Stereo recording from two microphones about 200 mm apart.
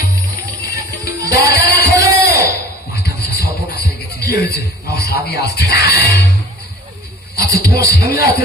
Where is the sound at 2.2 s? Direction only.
55° left (ahead or behind).